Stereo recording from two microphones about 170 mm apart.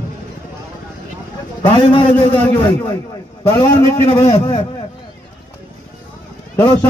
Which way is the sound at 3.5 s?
20° left (ahead or behind).